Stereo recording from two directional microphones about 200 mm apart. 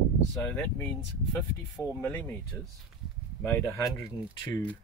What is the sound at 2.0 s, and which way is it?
Speech, 10° left (ahead or behind).